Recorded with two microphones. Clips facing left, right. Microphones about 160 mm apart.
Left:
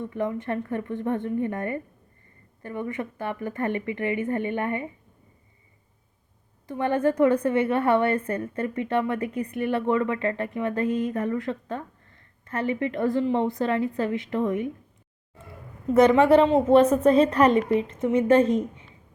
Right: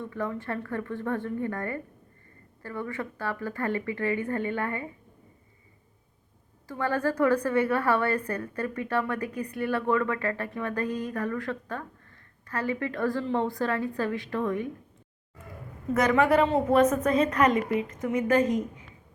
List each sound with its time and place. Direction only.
0.0 s a woman's voice: 20° left (ahead or behind)
6.7 s a woman's voice: 20° left (ahead or behind)
15.9 s a woman's voice: 25° left (ahead or behind)